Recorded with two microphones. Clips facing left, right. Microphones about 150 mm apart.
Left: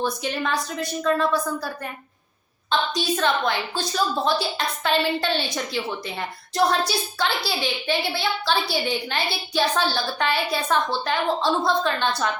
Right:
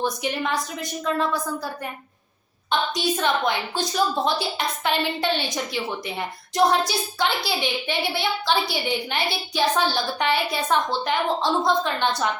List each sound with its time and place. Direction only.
0.0 s a woman's voice: 15° right (ahead or behind)
2.6 s a woman's voice: 15° right (ahead or behind)